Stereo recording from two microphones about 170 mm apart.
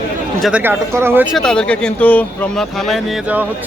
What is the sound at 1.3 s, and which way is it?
Speech, 5° left (ahead or behind).